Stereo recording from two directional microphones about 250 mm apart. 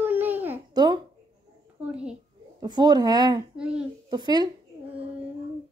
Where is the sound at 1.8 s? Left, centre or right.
Centre.